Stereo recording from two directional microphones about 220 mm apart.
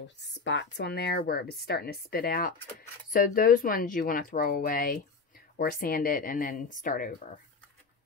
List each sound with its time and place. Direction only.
0.4 s speech: 55° left (ahead or behind); by 7.2 s 35° left (ahead or behind)